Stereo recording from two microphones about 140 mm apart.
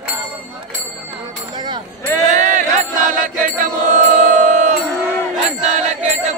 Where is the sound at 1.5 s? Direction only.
30° right (ahead or behind).